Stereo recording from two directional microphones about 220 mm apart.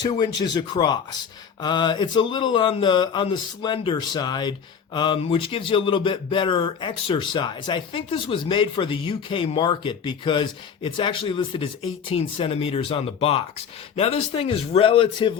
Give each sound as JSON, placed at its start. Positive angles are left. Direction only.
{"t": 0.0, "sound": "speech", "side_deg": 20}